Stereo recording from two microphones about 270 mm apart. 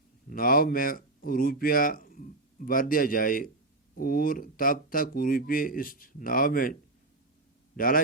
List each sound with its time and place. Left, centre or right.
0.3 s speech: left
7.8 s speech: left